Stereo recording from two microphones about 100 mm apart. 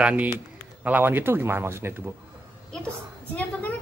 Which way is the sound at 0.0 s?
15° right (ahead or behind).